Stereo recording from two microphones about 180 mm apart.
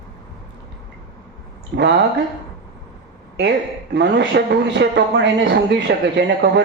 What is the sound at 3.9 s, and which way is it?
Speech, 70° right (ahead or behind).